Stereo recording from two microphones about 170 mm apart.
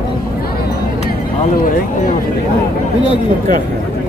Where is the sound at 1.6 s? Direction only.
55° left (ahead or behind).